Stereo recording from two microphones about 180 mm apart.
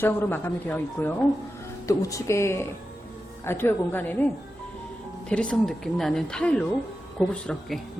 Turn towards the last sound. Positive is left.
turn(degrees=5)  # may be behind; listen again after turning